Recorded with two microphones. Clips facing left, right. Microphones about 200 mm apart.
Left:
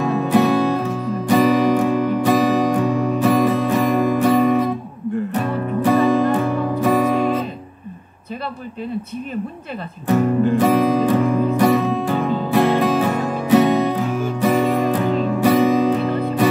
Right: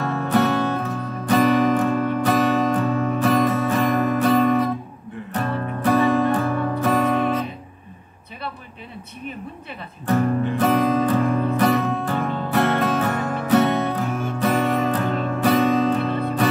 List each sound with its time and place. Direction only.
0.0 s music: 15° left (ahead or behind)
10.0 s music: 5° left (ahead or behind)